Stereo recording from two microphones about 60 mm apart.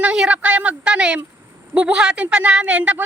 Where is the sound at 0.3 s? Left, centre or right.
Right.